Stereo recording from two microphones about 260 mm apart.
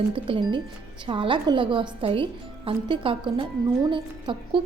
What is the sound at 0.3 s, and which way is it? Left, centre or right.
Speech, centre.